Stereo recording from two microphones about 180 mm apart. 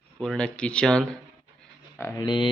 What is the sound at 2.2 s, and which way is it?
Speech, 25° left (ahead or behind).